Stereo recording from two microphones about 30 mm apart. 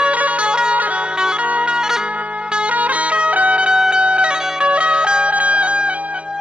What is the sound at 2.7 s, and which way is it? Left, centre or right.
Music, right.